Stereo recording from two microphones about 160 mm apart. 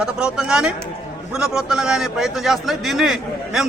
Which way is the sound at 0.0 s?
5° right (ahead or behind).